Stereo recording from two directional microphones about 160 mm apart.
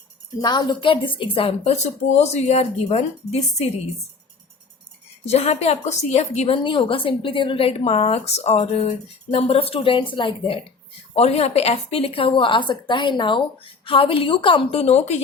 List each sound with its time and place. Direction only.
0.4 s a woman's voice: 25° left (ahead or behind); by 3.7 s 40° left (ahead or behind)
5.2 s a woman's voice: 40° left (ahead or behind)
6.6 s a woman's voice: 30° left (ahead or behind)